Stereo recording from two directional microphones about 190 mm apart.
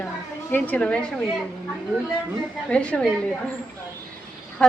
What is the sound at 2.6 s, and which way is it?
Speech, 5° left (ahead or behind).